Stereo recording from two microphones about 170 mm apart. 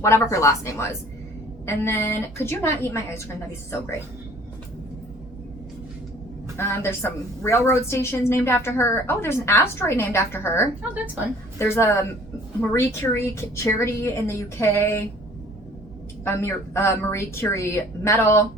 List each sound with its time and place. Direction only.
0.0 s a woman's voice: 15° left (ahead or behind)
6.6 s a woman's voice: 15° left (ahead or behind)
16.2 s a woman's voice: 15° left (ahead or behind)